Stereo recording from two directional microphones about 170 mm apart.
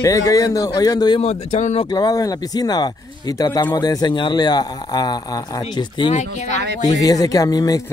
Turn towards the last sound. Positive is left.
turn(degrees=20)  # may be behind; listen again after turning